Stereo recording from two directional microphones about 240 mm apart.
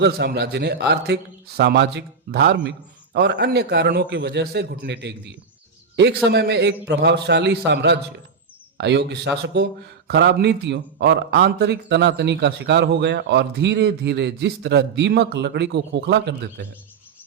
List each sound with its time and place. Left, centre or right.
0.0 s a man's voice: right
6.2 s a man's voice: right